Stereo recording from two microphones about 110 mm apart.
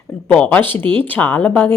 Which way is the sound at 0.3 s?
10° left (ahead or behind).